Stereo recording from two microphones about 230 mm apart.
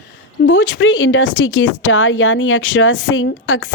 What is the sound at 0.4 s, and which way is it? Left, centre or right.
Speech, left.